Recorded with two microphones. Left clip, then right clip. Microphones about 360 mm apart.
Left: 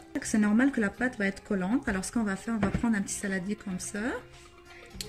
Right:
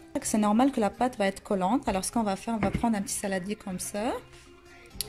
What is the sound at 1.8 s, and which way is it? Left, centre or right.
A woman's voice, centre.